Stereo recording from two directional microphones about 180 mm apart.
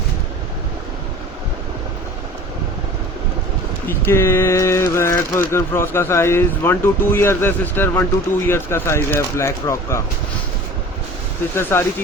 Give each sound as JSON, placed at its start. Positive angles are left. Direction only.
{"t": 3.8, "sound": "speech", "side_deg": 15}
{"t": 11.5, "sound": "speech", "side_deg": 15}